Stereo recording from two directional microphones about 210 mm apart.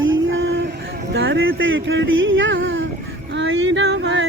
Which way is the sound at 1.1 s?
55° right (ahead or behind).